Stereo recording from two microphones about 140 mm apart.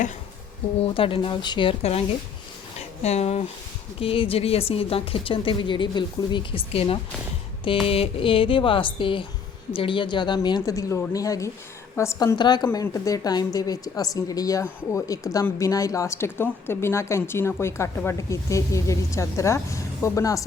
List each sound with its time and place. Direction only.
0.8 s a woman's voice: 40° left (ahead or behind); by 12.4 s 20° left (ahead or behind)
12.4 s a woman's voice: 30° left (ahead or behind)